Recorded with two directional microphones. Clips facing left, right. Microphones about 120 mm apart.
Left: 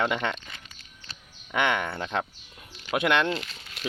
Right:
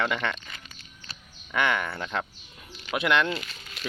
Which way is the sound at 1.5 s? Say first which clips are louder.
Left 1 dB; 20° left (ahead or behind).